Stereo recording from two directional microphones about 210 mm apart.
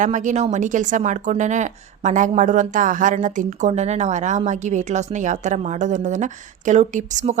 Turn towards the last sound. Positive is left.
turn(degrees=-35)  # may be behind; listen again after turning